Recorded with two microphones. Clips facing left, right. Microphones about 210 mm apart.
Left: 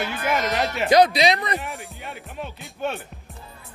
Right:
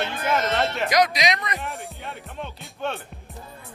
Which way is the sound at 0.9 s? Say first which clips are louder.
Left 7 dB; 30° left (ahead or behind).